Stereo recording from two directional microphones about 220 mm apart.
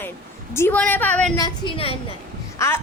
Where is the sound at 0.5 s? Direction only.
10° left (ahead or behind).